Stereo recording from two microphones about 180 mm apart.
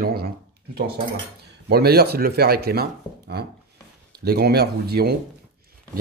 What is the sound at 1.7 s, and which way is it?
Speech, 60° right (ahead or behind).